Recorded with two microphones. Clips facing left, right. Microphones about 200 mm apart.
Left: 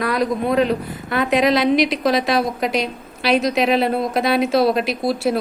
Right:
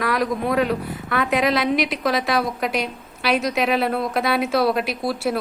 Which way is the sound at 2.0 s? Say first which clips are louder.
Left 3 dB; 25° left (ahead or behind).